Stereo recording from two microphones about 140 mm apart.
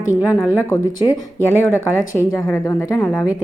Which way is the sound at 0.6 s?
20° left (ahead or behind).